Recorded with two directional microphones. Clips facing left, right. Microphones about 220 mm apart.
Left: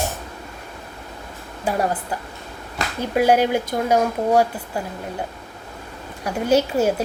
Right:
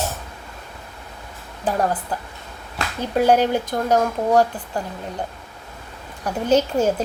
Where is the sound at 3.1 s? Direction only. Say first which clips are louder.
Even; 10° left (ahead or behind).